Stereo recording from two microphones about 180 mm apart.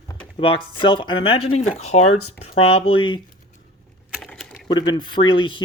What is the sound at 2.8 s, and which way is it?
Speech, 30° left (ahead or behind).